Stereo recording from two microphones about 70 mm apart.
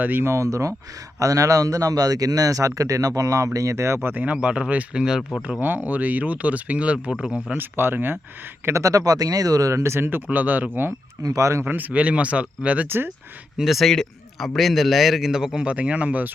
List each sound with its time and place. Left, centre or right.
0.0 s speech: right
0.3 s a man's voice: right
4.1 s speech: centre
5.5 s speech: right; by 7.3 s centre
7.5 s speech: right
8.6 s speech: right
9.8 s speech: right
11.2 s a man's voice: right
11.6 s speech: right
13.6 s speech: centre; by 16.3 s right